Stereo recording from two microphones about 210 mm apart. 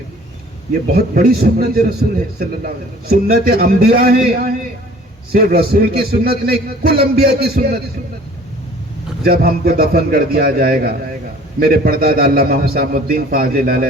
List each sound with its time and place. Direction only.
0.7 s a man's voice: 50° right (ahead or behind)
9.2 s a man's voice: 45° right (ahead or behind)